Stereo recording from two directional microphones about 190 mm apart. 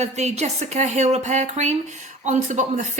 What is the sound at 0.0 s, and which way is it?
A woman's voice, 35° right (ahead or behind).